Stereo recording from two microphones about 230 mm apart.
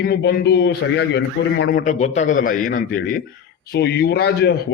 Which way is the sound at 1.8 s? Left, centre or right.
Left.